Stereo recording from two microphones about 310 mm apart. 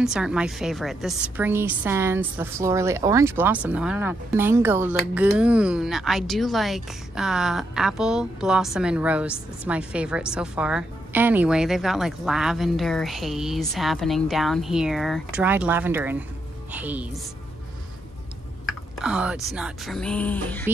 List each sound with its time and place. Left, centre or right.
0.0 s a woman's voice: centre
18.7 s speech: centre